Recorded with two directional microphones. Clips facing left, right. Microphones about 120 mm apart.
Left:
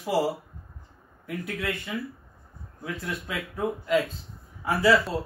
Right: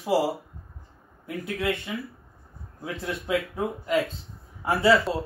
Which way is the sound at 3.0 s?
25° right (ahead or behind).